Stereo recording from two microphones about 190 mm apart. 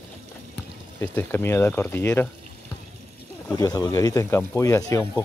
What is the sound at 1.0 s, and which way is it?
Speech, 10° left (ahead or behind).